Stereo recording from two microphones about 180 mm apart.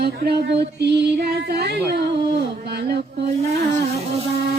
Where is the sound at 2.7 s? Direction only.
65° right (ahead or behind).